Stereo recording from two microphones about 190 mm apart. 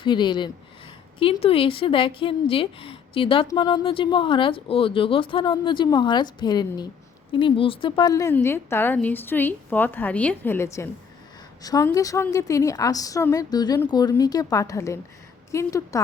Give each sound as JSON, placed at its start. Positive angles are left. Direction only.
{"t": 0.0, "sound": "a woman's voice", "side_deg": 25}